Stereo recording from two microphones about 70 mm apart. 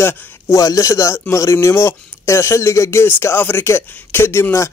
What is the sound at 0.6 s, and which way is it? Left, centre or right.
Speech, left.